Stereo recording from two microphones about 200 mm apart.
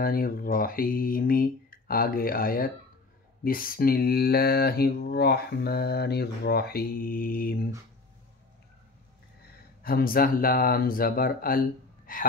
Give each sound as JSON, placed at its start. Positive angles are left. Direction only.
{"t": 0.0, "sound": "mantra", "side_deg": 45}
{"t": 9.8, "sound": "mantra", "side_deg": 45}
{"t": 12.1, "sound": "speech", "side_deg": 45}